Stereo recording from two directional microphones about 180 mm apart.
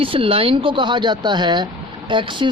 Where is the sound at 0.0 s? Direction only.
30° right (ahead or behind).